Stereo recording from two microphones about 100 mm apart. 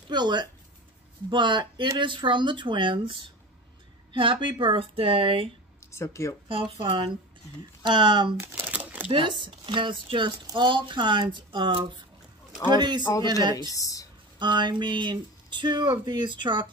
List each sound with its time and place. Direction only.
0.1 s speech: 45° right (ahead or behind)
5.9 s speech: 30° left (ahead or behind)
6.5 s speech: 55° right (ahead or behind)
8.4 s crumpling: 20° right (ahead or behind)
9.1 s speech: 55° right (ahead or behind)
13.7 s speech: 35° left (ahead or behind)
14.4 s speech: 50° right (ahead or behind)